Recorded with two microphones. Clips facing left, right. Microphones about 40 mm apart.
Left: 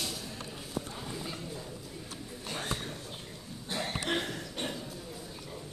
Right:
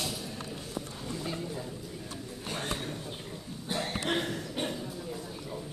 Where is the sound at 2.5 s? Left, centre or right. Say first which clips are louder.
Right 1 dB; centre.